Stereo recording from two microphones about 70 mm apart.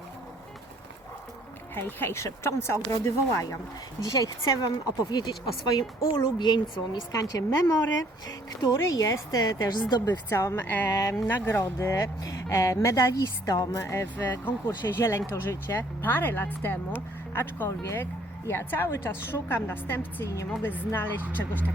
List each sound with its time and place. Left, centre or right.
1.7 s speech: left
4.0 s speech: left
10.2 s speech: left
10.8 s speech: left
11.1 s speech: left
11.5 s speech: left
13.9 s speech: left
20.2 s speech: left
20.6 s speech: left